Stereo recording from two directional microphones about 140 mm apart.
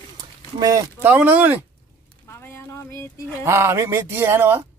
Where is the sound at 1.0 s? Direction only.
10° right (ahead or behind).